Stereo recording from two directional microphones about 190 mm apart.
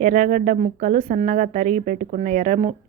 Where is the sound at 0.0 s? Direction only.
40° right (ahead or behind).